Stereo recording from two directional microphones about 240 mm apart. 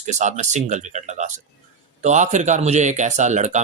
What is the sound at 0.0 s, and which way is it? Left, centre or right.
Speech, right.